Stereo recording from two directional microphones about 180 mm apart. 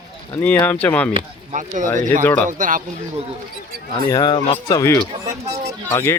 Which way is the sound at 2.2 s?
10° left (ahead or behind).